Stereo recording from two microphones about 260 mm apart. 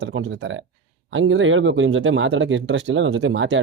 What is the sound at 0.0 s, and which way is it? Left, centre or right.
Speech, right.